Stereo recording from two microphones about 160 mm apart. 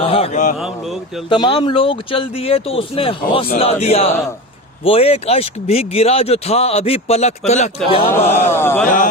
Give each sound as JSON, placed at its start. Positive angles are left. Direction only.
{"t": 0.0, "sound": "mantra", "side_deg": 35}
{"t": 1.3, "sound": "speech", "side_deg": 30}
{"t": 8.1, "sound": "speech", "side_deg": 15}
{"t": 8.4, "sound": "a sound", "side_deg": 15}